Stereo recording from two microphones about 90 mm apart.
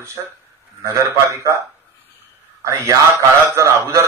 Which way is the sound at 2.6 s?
35° right (ahead or behind).